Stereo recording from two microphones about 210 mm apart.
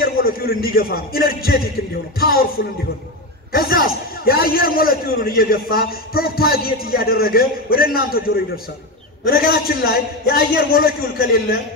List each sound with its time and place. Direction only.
0.0 s a man's voice: 45° left (ahead or behind)
3.5 s a man's voice: 45° left (ahead or behind)
9.2 s a man's voice: 45° left (ahead or behind)